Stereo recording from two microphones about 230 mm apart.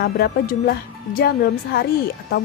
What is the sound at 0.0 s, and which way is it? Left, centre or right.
A woman's voice, left.